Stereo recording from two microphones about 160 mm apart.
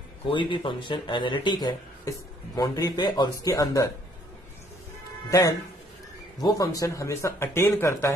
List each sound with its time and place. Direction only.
0.3 s speech: 30° left (ahead or behind)
5.3 s speech: 20° left (ahead or behind)